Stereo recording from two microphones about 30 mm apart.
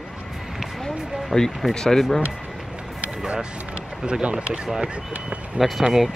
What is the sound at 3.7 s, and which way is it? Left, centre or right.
Speech, right.